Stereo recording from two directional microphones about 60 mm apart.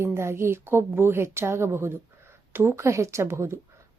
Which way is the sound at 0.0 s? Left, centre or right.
Right.